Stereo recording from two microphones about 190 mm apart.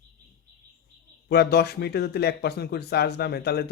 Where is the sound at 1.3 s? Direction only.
55° left (ahead or behind).